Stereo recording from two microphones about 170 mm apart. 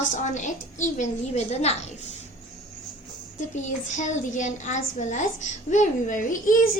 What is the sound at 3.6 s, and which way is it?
A child's voice, 45° left (ahead or behind).